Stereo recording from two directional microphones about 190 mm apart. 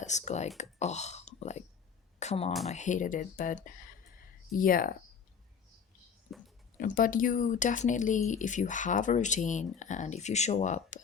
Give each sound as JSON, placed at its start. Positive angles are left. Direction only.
{"t": 0.0, "sound": "speech", "side_deg": 40}
{"t": 2.1, "sound": "a sound", "side_deg": 35}
{"t": 2.6, "sound": "speech", "side_deg": 40}
{"t": 6.7, "sound": "speech", "side_deg": 45}